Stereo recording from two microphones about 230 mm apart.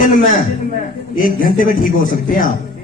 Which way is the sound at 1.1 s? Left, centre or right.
Left.